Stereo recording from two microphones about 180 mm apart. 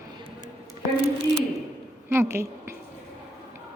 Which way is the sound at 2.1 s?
15° right (ahead or behind).